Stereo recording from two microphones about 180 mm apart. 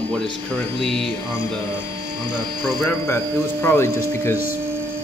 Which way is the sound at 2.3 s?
25° right (ahead or behind).